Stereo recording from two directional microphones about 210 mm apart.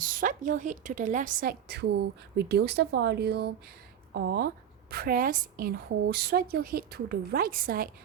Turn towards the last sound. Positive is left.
turn(degrees=-45)  # may be behind; listen again after turning